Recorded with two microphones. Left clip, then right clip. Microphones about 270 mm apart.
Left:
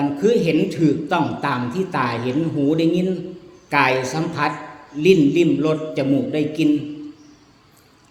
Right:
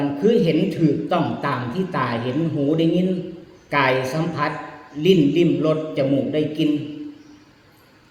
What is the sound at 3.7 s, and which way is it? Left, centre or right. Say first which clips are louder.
A man's voice: left 1 dB; centre.